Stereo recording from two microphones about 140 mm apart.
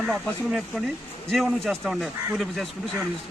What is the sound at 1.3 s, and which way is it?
Speech, centre (ahead or behind).